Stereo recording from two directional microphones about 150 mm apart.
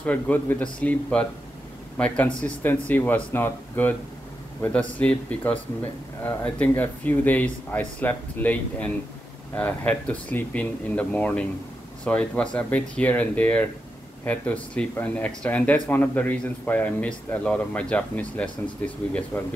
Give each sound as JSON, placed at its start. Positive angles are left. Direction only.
{"t": 0.0, "sound": "speech", "side_deg": 10}